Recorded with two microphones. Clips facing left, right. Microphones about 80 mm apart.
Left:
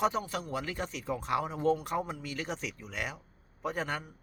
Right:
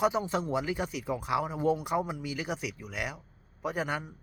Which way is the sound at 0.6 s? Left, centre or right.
Centre.